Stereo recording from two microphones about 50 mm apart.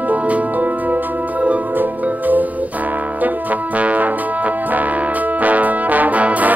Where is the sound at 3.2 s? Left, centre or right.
Right.